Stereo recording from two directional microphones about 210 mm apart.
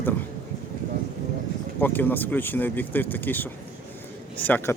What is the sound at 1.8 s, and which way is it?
Speech, 10° left (ahead or behind).